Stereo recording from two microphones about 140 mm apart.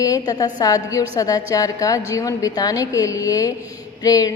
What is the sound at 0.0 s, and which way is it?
A woman's voice, 25° left (ahead or behind).